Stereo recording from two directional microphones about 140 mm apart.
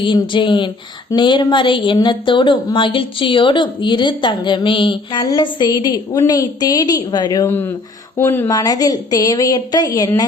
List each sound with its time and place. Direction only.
0.0 s a woman's voice: 35° left (ahead or behind)